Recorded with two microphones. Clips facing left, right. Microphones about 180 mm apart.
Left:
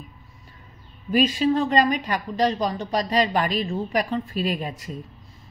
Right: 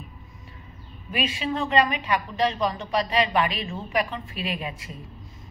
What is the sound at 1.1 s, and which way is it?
A woman's voice, 40° left (ahead or behind).